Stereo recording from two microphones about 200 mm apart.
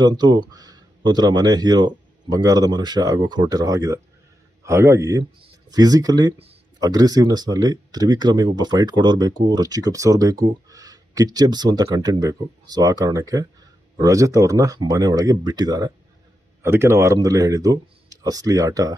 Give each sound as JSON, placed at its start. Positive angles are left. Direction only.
{"t": 0.0, "sound": "speech", "side_deg": -20}